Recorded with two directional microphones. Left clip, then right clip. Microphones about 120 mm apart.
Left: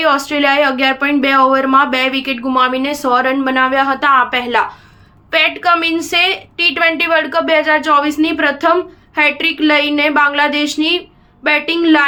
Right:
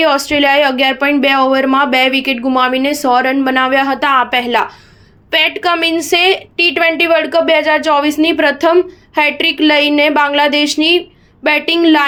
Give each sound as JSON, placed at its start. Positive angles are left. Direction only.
{"t": 0.0, "sound": "a woman's voice", "side_deg": -35}